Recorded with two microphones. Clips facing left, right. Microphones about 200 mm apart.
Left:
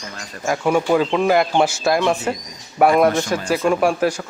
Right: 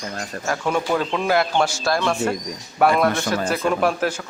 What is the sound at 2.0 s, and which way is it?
Speech, 20° left (ahead or behind).